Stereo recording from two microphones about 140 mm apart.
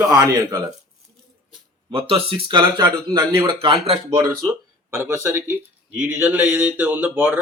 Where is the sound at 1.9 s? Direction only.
40° right (ahead or behind).